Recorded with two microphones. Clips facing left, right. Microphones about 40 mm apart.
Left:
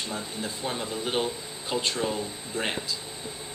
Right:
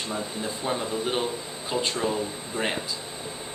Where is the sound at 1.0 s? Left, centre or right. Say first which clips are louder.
Right 1 dB; centre.